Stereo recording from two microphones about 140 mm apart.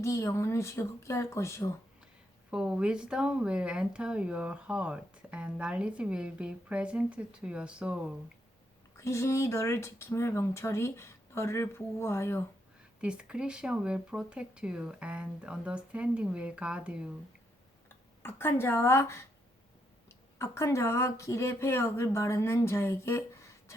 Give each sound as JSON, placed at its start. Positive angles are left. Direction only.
{"t": 0.0, "sound": "speech", "side_deg": 20}
{"t": 2.5, "sound": "speech", "side_deg": -5}
{"t": 9.0, "sound": "speech", "side_deg": 20}
{"t": 13.0, "sound": "speech", "side_deg": -5}
{"t": 18.2, "sound": "a woman's voice", "side_deg": 15}
{"t": 20.4, "sound": "speech", "side_deg": 20}